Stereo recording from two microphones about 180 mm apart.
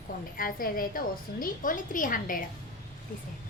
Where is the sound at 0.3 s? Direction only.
50° left (ahead or behind).